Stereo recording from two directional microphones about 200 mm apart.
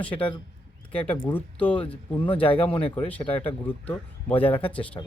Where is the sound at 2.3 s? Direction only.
25° left (ahead or behind).